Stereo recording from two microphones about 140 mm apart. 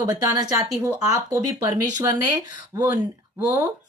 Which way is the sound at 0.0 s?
25° right (ahead or behind).